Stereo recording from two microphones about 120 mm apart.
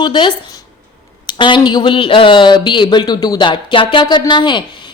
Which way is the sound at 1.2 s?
40° left (ahead or behind).